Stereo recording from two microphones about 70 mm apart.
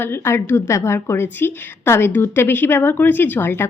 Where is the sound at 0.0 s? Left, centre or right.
Left.